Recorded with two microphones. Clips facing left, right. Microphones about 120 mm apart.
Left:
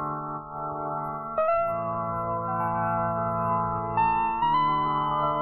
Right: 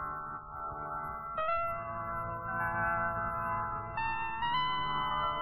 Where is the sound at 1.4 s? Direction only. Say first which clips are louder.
Left 11 dB; 45° left (ahead or behind).